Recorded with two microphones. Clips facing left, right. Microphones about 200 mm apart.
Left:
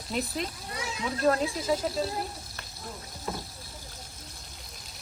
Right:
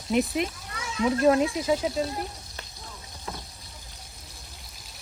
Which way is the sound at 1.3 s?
Centre (ahead or behind).